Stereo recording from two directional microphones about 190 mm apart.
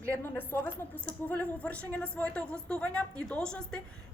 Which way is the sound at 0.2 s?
10° left (ahead or behind).